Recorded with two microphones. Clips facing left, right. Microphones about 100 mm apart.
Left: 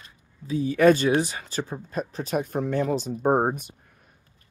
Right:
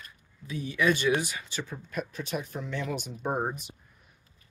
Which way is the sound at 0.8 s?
40° left (ahead or behind).